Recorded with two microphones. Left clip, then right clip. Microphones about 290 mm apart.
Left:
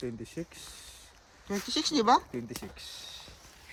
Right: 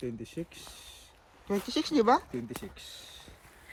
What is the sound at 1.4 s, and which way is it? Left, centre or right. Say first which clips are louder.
Speech: even; centre.